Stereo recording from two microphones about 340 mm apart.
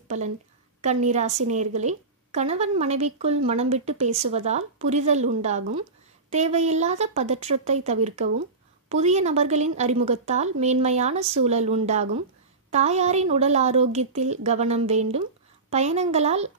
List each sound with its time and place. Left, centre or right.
0.1 s a woman's voice: right